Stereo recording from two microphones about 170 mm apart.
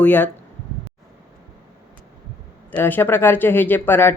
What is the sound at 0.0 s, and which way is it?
Speech, 10° left (ahead or behind).